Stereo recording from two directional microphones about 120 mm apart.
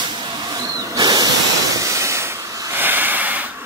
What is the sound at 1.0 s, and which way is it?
Hiss, 35° right (ahead or behind).